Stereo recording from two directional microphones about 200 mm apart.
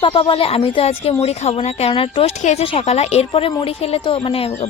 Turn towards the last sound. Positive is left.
turn(degrees=30)  # may be behind; listen again after turning